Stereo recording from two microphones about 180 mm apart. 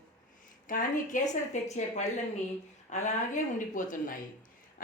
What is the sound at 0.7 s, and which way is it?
Speech, 45° left (ahead or behind).